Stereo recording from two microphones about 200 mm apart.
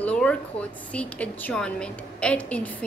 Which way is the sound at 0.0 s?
5° left (ahead or behind).